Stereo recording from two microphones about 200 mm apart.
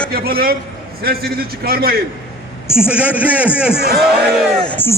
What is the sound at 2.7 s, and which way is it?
A man's voice, 5° right (ahead or behind).